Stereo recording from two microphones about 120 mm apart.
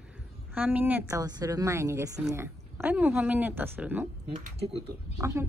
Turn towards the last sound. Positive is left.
turn(degrees=-25)  # may be behind; listen again after turning